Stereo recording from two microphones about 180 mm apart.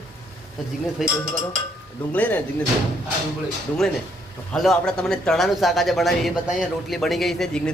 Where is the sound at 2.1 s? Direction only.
10° left (ahead or behind).